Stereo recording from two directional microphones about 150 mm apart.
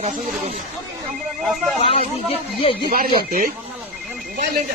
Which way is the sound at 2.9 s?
75° right (ahead or behind).